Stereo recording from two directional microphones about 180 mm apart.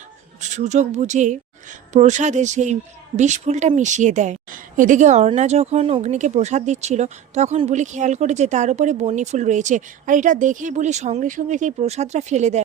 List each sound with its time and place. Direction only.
0.4 s a woman's voice: 40° right (ahead or behind)